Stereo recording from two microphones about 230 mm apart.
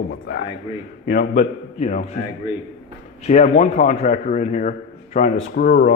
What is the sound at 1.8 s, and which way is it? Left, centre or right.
Speech, left.